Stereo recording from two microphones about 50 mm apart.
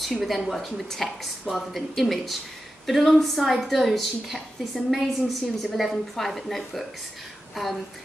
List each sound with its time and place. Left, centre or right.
0.2 s a woman's voice: centre